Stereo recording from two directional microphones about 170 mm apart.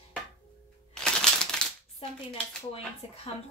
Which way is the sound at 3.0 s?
35° left (ahead or behind).